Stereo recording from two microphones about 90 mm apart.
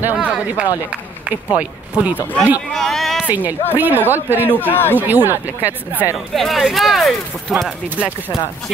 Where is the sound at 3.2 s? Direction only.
20° right (ahead or behind).